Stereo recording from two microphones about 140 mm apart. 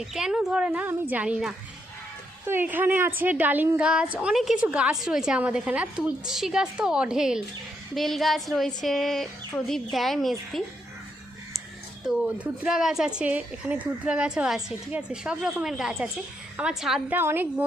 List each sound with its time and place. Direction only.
0.0 s a woman's voice: 5° right (ahead or behind)
12.0 s speech: 5° right (ahead or behind)
17.2 s a woman's voice: 15° right (ahead or behind)